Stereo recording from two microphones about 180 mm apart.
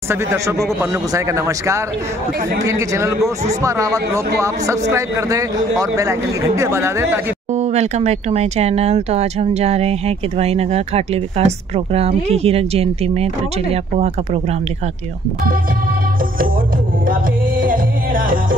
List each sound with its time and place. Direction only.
0.1 s a man's voice: 15° right (ahead or behind)
7.5 s speech: 40° right (ahead or behind)
17.1 s music: 50° right (ahead or behind)